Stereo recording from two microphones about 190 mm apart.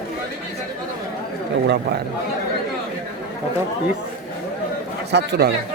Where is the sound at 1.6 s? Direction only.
60° right (ahead or behind).